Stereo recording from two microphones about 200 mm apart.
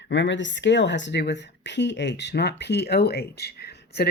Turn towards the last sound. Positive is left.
turn(degrees=55)  # may be behind; listen again after turning